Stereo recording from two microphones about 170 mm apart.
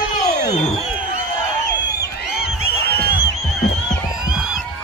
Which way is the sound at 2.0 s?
70° left (ahead or behind).